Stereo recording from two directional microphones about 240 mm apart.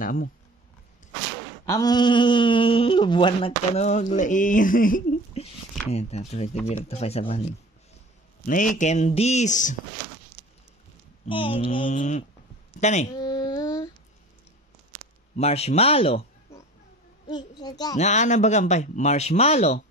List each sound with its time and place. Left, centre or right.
0.0 s speech: left
1.7 s speech: centre; by 9.8 s left
11.2 s speech: left
13.2 s a sound: centre
15.3 s speech: left
16.5 s a sound: centre
17.3 s a child's voice: centre
17.9 s speech: left